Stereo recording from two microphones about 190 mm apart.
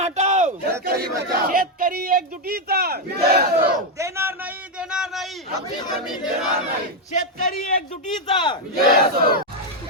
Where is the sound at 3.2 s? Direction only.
55° right (ahead or behind).